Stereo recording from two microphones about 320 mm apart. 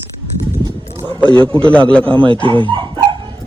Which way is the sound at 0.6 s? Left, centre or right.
Centre.